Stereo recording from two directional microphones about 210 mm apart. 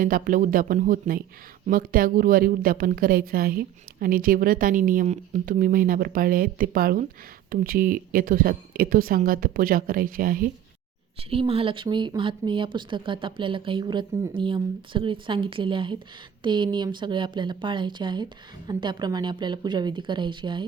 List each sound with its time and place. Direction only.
0.0 s a woman's voice: 40° right (ahead or behind)
11.2 s speech: 25° right (ahead or behind)